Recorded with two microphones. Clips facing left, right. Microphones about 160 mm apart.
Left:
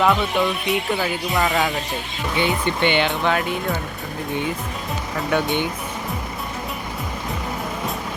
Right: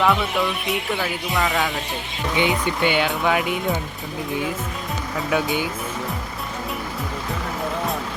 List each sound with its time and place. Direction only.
0.0 s speech: centre (ahead or behind)
2.3 s speech: 15° right (ahead or behind)
5.3 s speech: 5° right (ahead or behind)